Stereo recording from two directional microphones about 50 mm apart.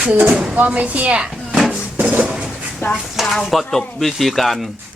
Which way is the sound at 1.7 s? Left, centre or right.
Right.